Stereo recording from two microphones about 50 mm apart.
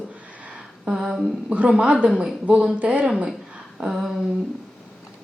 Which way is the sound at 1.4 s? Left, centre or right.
Right.